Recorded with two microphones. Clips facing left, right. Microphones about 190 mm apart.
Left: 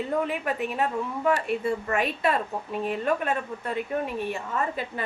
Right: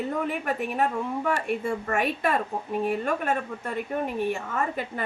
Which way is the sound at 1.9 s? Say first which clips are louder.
Right 1 dB; 50° right (ahead or behind).